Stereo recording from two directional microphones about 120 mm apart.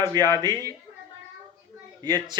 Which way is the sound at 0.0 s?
35° right (ahead or behind).